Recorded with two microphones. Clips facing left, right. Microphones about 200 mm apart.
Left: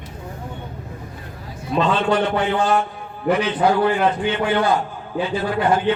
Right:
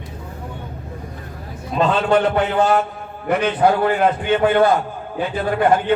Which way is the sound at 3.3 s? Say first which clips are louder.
Right 1 dB; 55° right (ahead or behind).